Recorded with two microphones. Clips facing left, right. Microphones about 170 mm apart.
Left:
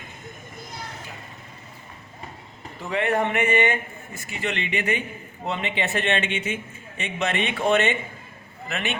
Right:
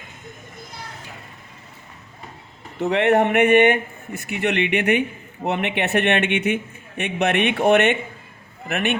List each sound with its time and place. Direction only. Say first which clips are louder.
2.7 s a man's voice: right 7 dB; 70° right (ahead or behind)